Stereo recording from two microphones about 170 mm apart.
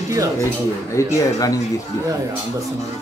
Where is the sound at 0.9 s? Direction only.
20° left (ahead or behind).